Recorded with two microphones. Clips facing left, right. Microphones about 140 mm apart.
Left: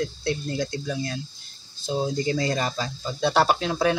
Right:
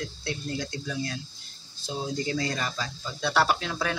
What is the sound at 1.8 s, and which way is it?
Speech, 25° left (ahead or behind).